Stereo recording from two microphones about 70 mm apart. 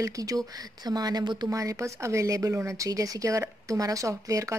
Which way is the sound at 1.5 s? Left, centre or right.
Right.